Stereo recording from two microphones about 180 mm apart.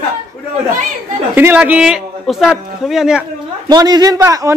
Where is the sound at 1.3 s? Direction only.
10° right (ahead or behind).